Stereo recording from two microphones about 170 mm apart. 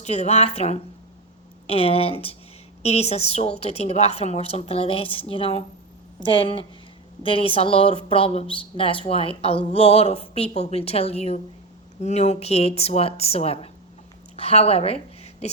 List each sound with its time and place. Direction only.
0.0 s a woman's voice: 40° left (ahead or behind)